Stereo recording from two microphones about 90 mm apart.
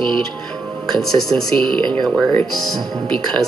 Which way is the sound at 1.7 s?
60° right (ahead or behind).